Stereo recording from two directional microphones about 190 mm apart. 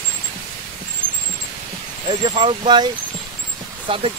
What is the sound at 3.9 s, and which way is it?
Speech, 30° right (ahead or behind).